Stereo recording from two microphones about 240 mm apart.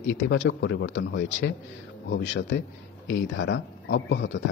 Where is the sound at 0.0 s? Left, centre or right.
Left.